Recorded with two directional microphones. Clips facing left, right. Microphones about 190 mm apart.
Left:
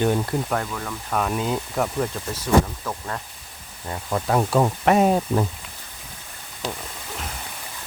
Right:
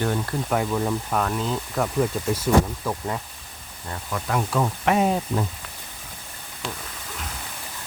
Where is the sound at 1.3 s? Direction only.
10° left (ahead or behind).